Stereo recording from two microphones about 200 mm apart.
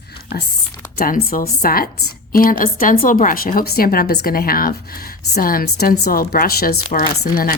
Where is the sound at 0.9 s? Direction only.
45° left (ahead or behind).